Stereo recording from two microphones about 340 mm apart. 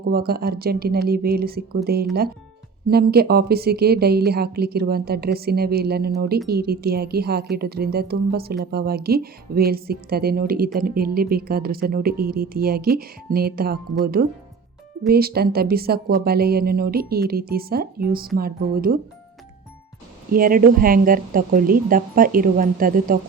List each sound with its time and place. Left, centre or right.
0.0 s a woman's voice: right
20.3 s a woman's voice: right